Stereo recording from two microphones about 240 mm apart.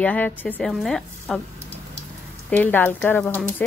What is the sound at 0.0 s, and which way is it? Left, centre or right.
A woman's voice, centre.